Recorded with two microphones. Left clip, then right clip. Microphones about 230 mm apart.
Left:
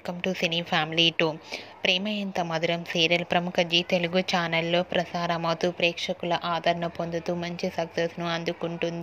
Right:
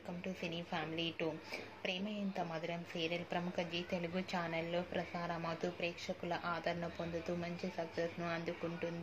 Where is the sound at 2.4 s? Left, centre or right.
Left.